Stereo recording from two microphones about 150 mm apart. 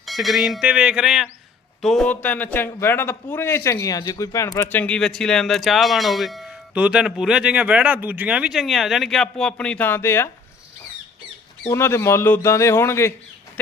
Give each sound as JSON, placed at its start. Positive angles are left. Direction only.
{"t": 0.0, "sound": "a man's voice", "side_deg": 0}
{"t": 11.7, "sound": "a man's voice", "side_deg": 15}